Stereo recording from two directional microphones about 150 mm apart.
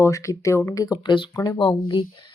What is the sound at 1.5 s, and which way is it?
Speech, 35° left (ahead or behind).